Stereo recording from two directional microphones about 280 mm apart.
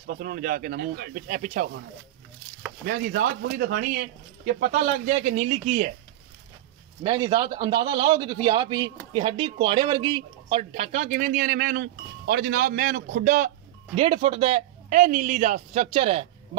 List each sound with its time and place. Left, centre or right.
0.0 s speech: right
2.8 s speech: right
7.0 s a man's voice: centre